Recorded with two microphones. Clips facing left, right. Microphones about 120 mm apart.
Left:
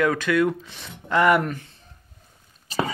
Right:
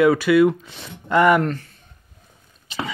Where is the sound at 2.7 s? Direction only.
40° left (ahead or behind).